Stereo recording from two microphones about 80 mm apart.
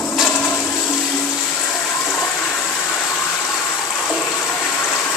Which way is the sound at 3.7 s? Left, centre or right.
Centre.